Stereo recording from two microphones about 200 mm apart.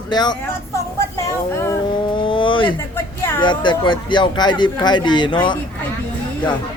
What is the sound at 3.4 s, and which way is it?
Speech, 25° left (ahead or behind).